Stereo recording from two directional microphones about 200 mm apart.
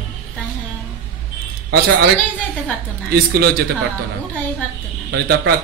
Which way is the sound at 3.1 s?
50° right (ahead or behind).